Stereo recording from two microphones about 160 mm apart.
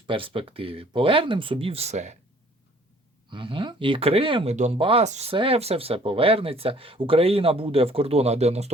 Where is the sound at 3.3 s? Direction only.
30° right (ahead or behind).